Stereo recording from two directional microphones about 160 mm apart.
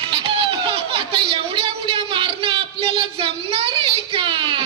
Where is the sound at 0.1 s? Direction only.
35° right (ahead or behind).